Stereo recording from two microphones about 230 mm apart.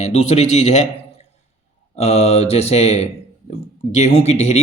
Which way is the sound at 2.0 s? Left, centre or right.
Left.